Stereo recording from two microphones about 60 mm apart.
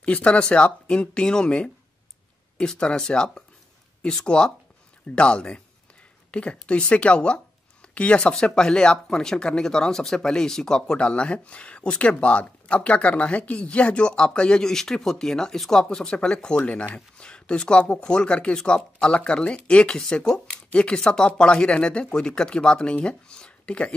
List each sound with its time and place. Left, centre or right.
0.0 s speech: left